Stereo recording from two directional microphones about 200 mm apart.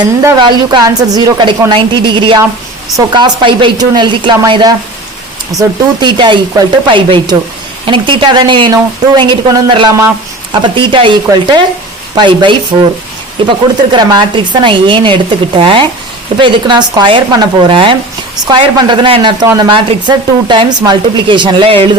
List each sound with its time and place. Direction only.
0.3 s speech: 20° right (ahead or behind)